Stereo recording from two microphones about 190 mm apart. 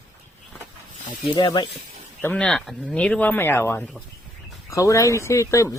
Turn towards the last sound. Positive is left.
turn(degrees=15)  # may be behind; listen again after turning